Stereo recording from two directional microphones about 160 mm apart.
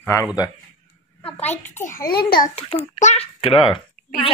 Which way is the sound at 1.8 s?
60° left (ahead or behind).